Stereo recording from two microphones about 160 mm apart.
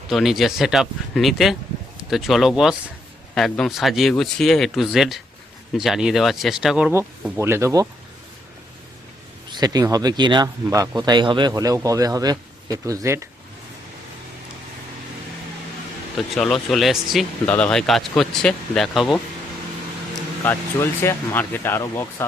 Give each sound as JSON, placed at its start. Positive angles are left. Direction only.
{"t": 0.1, "sound": "speech", "side_deg": 0}
{"t": 6.9, "sound": "speech", "side_deg": -15}
{"t": 9.5, "sound": "speech", "side_deg": -25}
{"t": 16.3, "sound": "speech", "side_deg": 0}
{"t": 20.4, "sound": "speech", "side_deg": 15}